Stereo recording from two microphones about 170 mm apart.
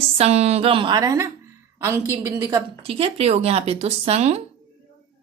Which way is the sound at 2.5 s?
30° right (ahead or behind).